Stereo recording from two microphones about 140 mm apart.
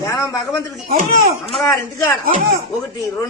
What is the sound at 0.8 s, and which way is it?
Speech, 85° right.